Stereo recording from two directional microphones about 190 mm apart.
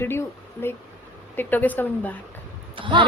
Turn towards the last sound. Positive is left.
turn(degrees=-25)  # may be behind; listen again after turning